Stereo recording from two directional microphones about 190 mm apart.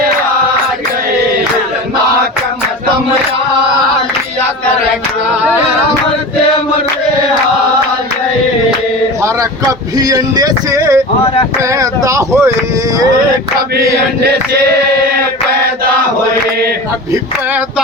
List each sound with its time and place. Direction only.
9.2 s speech: 15° right (ahead or behind)